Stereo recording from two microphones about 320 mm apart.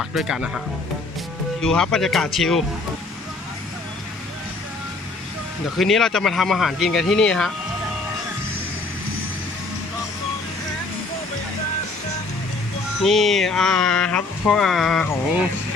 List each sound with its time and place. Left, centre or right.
0.0 s speech: centre
1.6 s speech: centre
5.7 s speech: centre
13.0 s speech: centre